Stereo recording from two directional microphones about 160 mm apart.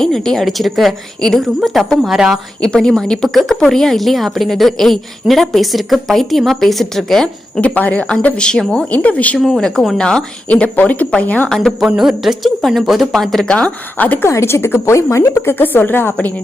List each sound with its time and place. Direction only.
0.0 s a woman's voice: 5° left (ahead or behind)